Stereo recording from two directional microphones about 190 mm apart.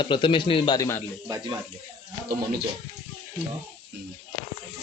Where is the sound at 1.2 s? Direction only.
20° right (ahead or behind).